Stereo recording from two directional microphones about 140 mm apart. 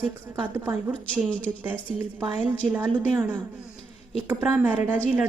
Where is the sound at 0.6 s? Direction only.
20° right (ahead or behind).